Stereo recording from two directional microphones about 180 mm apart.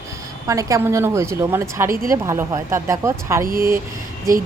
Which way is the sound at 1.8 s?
50° right (ahead or behind).